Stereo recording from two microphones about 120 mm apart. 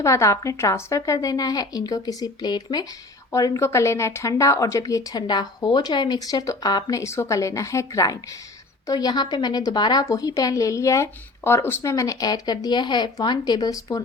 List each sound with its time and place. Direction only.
0.0 s a woman's voice: 25° left (ahead or behind)